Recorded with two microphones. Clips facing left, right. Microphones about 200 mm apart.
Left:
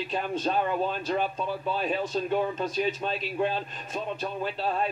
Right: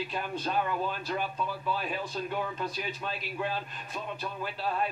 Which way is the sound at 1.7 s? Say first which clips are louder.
Left 8 dB; 25° left (ahead or behind).